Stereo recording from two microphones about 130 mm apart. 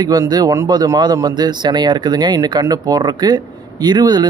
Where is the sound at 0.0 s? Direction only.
30° right (ahead or behind).